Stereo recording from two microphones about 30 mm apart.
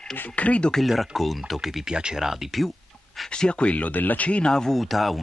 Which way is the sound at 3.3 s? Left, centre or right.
Left.